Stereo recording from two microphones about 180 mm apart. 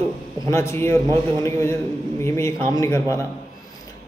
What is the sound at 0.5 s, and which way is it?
A man's voice, 15° left (ahead or behind).